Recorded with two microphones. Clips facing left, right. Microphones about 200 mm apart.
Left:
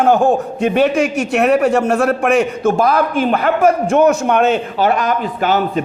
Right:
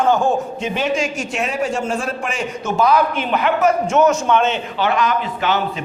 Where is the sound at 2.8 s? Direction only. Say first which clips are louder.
Right 2 dB; 50° left (ahead or behind).